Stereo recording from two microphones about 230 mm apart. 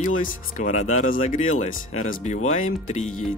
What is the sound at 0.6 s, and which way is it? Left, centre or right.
Speech, left.